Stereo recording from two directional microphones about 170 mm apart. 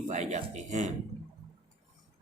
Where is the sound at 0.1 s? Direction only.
45° right (ahead or behind).